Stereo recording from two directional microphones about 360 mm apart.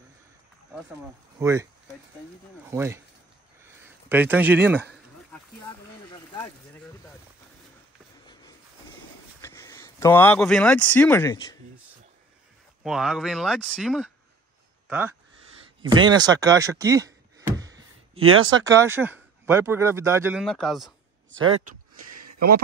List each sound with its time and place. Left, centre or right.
1.4 s speech: centre
2.7 s speech: centre
4.1 s speech: centre
9.4 s speech: centre
12.8 s speech: centre
15.8 s a sound: centre
18.2 s speech: right
18.7 s speech: centre
21.9 s a sound: right